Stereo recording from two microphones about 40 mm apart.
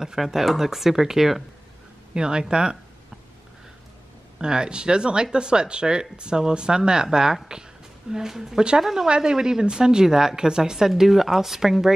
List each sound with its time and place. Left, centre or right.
0.0 s a woman's voice: centre
2.1 s speech: right
4.4 s a woman's voice: right